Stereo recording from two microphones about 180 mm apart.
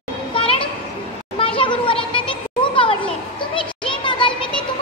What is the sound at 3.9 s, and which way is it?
Children playing, 25° left (ahead or behind).